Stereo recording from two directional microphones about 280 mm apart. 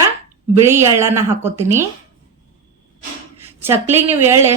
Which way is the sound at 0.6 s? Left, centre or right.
Centre.